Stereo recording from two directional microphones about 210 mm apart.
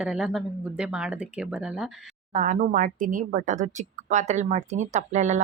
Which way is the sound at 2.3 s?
35° right (ahead or behind).